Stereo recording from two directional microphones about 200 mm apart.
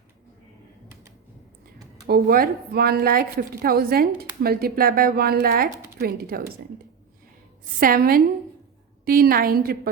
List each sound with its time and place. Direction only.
2.0 s a woman's voice: 50° right (ahead or behind)
7.8 s a woman's voice: 45° right (ahead or behind)